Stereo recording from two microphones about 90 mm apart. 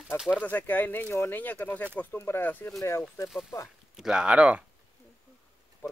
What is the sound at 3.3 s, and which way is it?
Speech, 5° right (ahead or behind).